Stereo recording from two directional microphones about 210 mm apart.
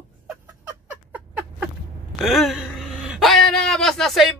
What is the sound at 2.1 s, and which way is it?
Speech, centre (ahead or behind).